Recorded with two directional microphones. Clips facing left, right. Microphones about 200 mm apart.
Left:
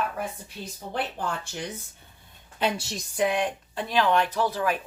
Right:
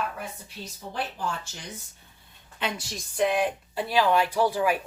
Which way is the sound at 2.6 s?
25° left (ahead or behind).